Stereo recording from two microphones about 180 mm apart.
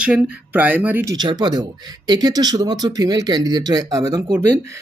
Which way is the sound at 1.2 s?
25° right (ahead or behind).